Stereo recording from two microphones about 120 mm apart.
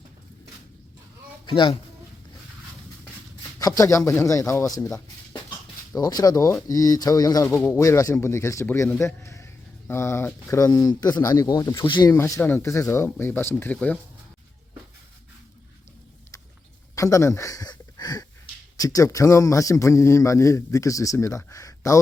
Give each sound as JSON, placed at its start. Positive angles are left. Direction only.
{"t": 1.5, "sound": "speech", "side_deg": 40}
{"t": 3.6, "sound": "a man's voice", "side_deg": 30}
{"t": 12.1, "sound": "a man's voice", "side_deg": 20}
{"t": 16.9, "sound": "a man's voice", "side_deg": 25}